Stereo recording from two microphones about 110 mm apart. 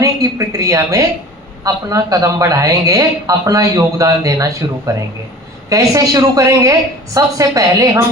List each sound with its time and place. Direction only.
0.0 s a sound: 30° right (ahead or behind)
1.6 s speech: 30° right (ahead or behind)
5.6 s speech: 30° right (ahead or behind)